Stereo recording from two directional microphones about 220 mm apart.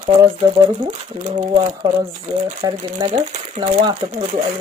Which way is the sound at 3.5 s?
30° right (ahead or behind).